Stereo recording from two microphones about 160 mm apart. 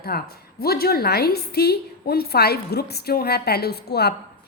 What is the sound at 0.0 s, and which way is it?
A woman's voice, 75° left (ahead or behind).